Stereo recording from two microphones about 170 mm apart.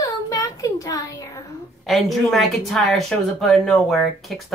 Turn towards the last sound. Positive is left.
turn(degrees=0)  # may be behind; listen again after turning